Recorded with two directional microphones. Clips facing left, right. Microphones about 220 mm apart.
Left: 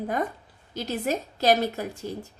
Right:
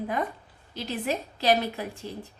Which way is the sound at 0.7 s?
45° left (ahead or behind).